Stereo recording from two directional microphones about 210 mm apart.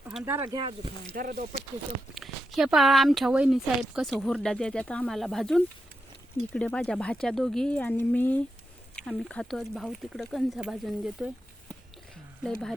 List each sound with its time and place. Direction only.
0.1 s speech: 5° right (ahead or behind); by 0.9 s 20° right (ahead or behind)
1.1 s speech: 45° right (ahead or behind)
2.1 s speech: centre (ahead or behind)